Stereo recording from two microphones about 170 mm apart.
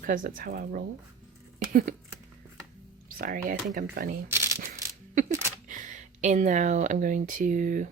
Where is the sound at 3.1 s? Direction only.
55° right (ahead or behind).